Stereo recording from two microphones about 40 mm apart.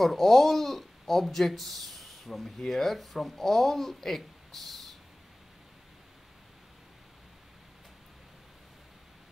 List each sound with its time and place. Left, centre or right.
0.0 s speech: centre